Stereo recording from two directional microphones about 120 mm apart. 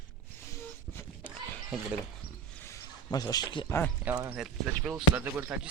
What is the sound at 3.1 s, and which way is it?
Speech, 35° left (ahead or behind).